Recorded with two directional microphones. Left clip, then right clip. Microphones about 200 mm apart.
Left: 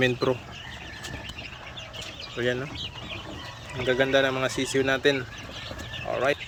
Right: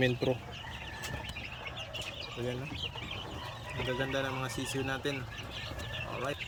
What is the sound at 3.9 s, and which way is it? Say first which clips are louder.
Speech: left 13 dB; 40° left (ahead or behind).